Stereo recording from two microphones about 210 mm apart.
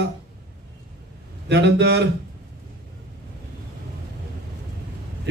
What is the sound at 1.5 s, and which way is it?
Speech, 55° right (ahead or behind).